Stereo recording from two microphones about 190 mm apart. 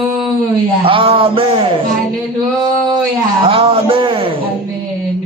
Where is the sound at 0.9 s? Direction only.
30° right (ahead or behind).